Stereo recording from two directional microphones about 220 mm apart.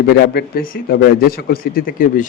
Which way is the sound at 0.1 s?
45° left (ahead or behind).